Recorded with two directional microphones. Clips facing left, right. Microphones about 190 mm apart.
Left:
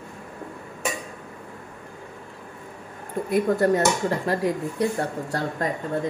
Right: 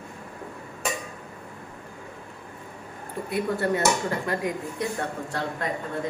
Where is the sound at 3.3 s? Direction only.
45° left (ahead or behind).